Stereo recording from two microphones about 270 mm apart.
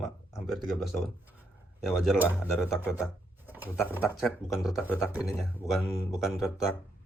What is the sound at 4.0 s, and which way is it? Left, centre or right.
Speech, centre.